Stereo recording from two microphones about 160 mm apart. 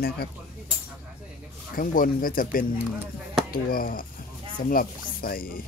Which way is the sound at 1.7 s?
60° left (ahead or behind).